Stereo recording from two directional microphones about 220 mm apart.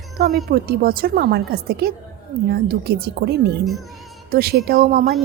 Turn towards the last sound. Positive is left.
turn(degrees=-45)  # may be behind; listen again after turning